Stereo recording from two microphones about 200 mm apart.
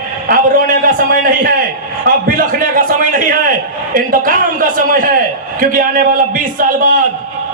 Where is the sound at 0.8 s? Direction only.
45° right (ahead or behind).